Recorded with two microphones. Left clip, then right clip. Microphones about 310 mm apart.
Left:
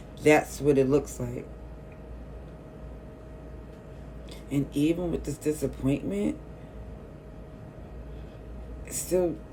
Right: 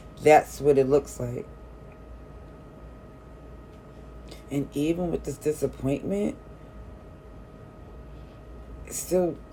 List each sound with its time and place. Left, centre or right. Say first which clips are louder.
0.2 s speech: right 4 dB; centre
4.4 s speech: even; centre
8.9 s a sound: right 2 dB; centre